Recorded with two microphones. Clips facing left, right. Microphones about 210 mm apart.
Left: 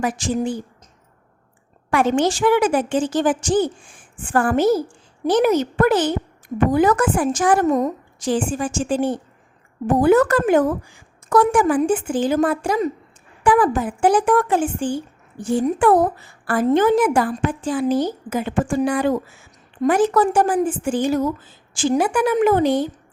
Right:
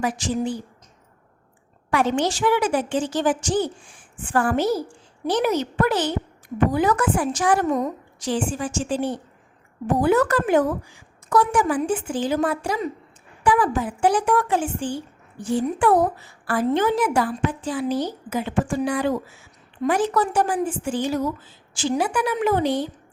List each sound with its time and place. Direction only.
0.0 s a woman's voice: 50° left (ahead or behind)
1.9 s a woman's voice: 50° left (ahead or behind)